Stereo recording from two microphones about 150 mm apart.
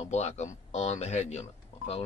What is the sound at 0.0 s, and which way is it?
Speech, 50° left (ahead or behind).